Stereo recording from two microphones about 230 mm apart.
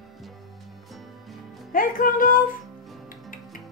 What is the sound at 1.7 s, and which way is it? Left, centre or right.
Music, left.